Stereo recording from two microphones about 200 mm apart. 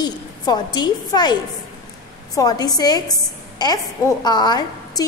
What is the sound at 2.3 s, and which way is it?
A woman's voice, 20° left (ahead or behind).